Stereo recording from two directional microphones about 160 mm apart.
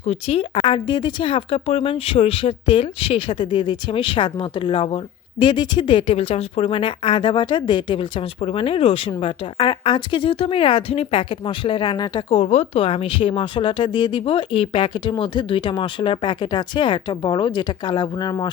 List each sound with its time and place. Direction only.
0.0 s speech: 40° left (ahead or behind)
12.3 s speech: 40° left (ahead or behind); by 18.4 s 25° left (ahead or behind)